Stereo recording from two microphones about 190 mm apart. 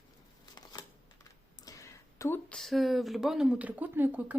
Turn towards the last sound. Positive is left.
turn(degrees=-10)  # may be behind; listen again after turning